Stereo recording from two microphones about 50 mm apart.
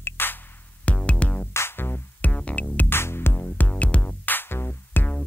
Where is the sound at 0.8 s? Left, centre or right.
Left.